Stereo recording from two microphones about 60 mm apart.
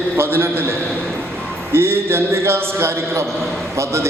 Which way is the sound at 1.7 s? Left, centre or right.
Right.